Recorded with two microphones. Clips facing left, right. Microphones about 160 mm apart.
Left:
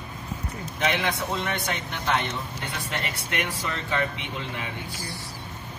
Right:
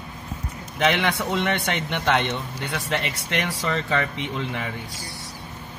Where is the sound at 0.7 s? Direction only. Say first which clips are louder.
Right 4 dB; 70° right (ahead or behind).